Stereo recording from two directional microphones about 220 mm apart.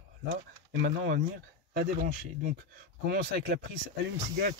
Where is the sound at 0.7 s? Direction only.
55° right (ahead or behind).